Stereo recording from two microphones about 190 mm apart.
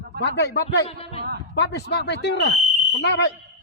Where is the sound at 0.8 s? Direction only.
30° left (ahead or behind).